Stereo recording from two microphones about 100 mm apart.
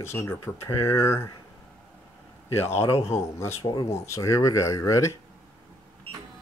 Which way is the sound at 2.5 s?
25° left (ahead or behind).